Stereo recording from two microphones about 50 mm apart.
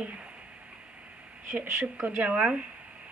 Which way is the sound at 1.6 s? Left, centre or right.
Right.